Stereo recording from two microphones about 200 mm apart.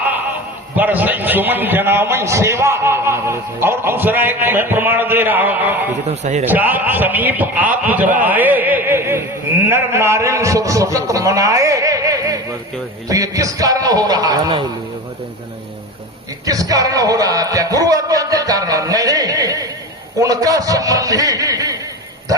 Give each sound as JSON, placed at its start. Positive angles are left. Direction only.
{"t": 0.8, "sound": "a man's voice", "side_deg": -10}
{"t": 6.1, "sound": "a man's voice", "side_deg": -35}
{"t": 6.5, "sound": "a man's voice", "side_deg": -10}
{"t": 8.2, "sound": "a sound", "side_deg": -10}
{"t": 9.6, "sound": "a man's voice", "side_deg": -10}
{"t": 16.5, "sound": "a man's voice", "side_deg": -15}